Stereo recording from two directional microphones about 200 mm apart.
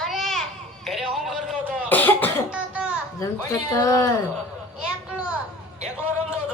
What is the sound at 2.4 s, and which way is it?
Cough, 5° right (ahead or behind).